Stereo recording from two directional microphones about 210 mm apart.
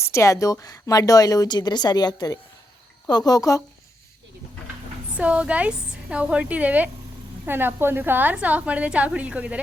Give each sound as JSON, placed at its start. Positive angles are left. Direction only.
{"t": 0.0, "sound": "a woman's voice", "side_deg": 15}
{"t": 5.1, "sound": "a woman's voice", "side_deg": -5}